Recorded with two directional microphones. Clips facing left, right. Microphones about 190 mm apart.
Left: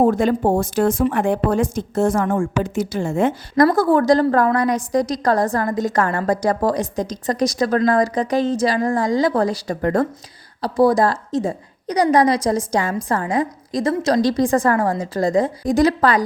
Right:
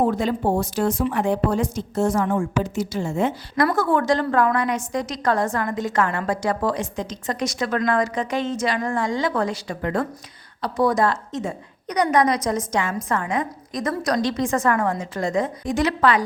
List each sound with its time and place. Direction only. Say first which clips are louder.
0.0 s speech: left 5 dB; 50° left (ahead or behind)
3.7 s a woman's voice: left 3 dB; 35° left (ahead or behind)